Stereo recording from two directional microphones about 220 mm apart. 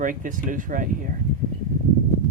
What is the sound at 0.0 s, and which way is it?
Cutlery, 35° right (ahead or behind).